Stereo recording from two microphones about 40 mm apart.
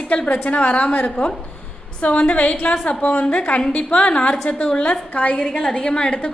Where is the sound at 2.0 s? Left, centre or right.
Left.